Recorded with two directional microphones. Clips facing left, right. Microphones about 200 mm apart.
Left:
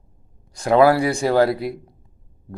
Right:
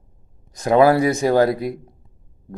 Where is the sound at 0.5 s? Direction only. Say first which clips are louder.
Right 1 dB; 20° right (ahead or behind).